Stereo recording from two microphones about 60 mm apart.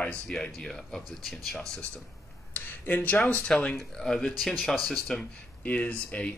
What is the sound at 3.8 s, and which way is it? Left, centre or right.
Speech, centre.